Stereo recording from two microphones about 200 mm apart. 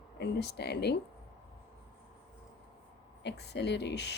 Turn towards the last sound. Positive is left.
turn(degrees=55)  # may be behind; listen again after turning